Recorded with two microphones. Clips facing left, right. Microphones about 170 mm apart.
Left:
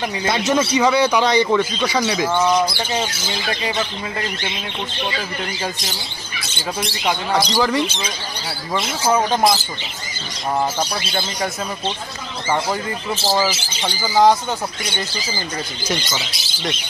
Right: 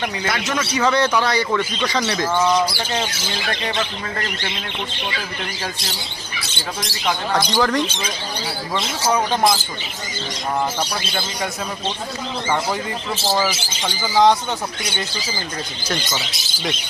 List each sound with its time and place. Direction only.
0.2 s speech: 25° left (ahead or behind)
0.8 s speech: 10° left (ahead or behind)
1.6 s speech: 10° left (ahead or behind)
6.8 s speech: 10° left (ahead or behind)
13.3 s speech: 5° left (ahead or behind)